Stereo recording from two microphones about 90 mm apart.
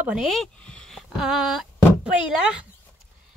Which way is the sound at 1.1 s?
5° right (ahead or behind).